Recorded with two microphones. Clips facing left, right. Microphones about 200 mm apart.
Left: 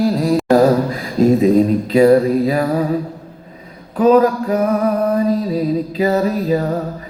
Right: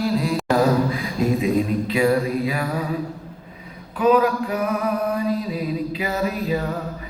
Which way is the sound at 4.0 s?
40° left (ahead or behind).